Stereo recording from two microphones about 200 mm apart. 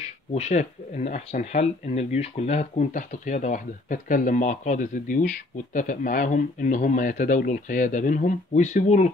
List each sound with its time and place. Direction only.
0.3 s speech: 35° left (ahead or behind)